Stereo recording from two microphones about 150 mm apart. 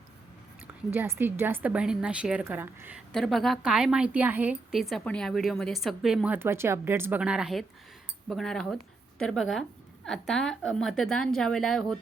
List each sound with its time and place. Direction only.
0.9 s a woman's voice: 15° right (ahead or behind)
3.1 s a woman's voice: 5° left (ahead or behind)